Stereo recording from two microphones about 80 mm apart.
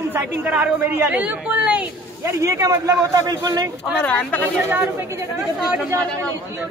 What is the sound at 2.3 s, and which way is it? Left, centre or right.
A man's voice, right.